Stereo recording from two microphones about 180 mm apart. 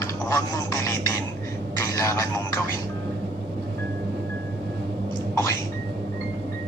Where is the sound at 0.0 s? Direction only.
20° left (ahead or behind).